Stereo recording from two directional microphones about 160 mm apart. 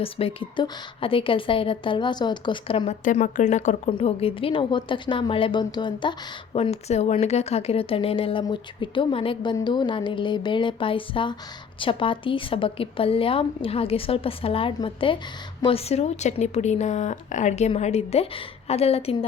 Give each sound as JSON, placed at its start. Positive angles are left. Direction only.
{"t": 0.0, "sound": "a woman's voice", "side_deg": 35}
{"t": 3.0, "sound": "a woman's voice", "side_deg": 55}
{"t": 3.8, "sound": "a woman's voice", "side_deg": 35}